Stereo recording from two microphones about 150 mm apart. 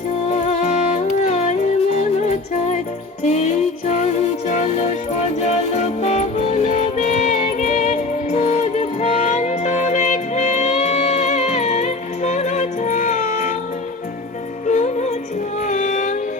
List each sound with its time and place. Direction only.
0.3 s music: 50° left (ahead or behind)
14.7 s music: 55° left (ahead or behind)